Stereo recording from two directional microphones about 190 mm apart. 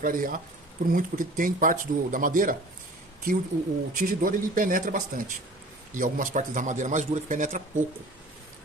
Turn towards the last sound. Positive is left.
turn(degrees=-40)  # may be behind; listen again after turning